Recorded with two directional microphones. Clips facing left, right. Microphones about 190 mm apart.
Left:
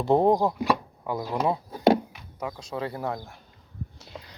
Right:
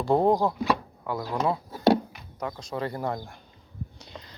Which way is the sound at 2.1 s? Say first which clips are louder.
Even; 10° left (ahead or behind).